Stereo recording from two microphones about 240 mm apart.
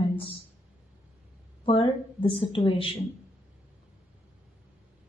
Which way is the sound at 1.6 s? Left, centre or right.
Left.